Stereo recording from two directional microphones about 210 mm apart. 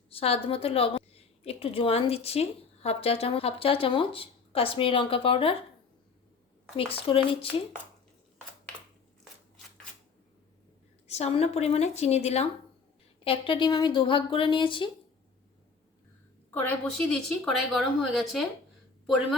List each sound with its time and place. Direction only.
0.1 s a woman's voice: 25° left (ahead or behind)
6.9 s a woman's voice: 25° left (ahead or behind)
11.1 s a woman's voice: 30° left (ahead or behind)
16.6 s speech: 5° left (ahead or behind)